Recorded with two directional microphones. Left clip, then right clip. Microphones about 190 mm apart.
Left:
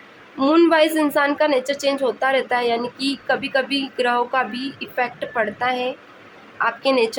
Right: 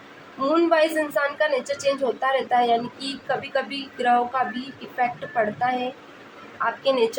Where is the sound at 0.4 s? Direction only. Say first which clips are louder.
Left 4 dB; 50° left (ahead or behind).